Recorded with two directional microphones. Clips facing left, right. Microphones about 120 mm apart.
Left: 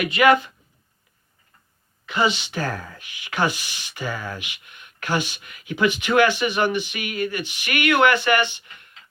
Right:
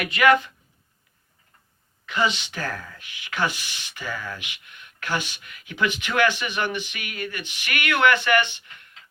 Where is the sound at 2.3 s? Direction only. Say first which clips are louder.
Left 4 dB; 5° left (ahead or behind).